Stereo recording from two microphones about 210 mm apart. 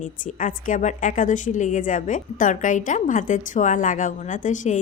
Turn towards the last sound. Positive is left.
turn(degrees=35)  # may be behind; listen again after turning